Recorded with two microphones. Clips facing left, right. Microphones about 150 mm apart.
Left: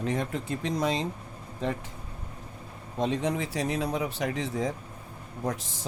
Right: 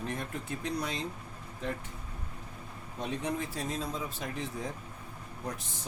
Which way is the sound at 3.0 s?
90° left.